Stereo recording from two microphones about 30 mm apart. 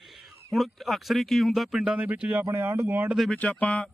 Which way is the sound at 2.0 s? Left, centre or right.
Right.